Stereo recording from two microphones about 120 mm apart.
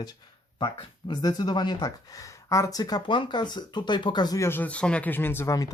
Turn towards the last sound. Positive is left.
turn(degrees=25)  # may be behind; listen again after turning